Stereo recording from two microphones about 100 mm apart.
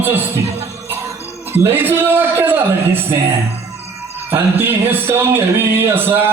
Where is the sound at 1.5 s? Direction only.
20° right (ahead or behind).